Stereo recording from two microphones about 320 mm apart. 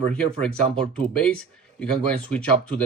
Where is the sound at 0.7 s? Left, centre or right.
Centre.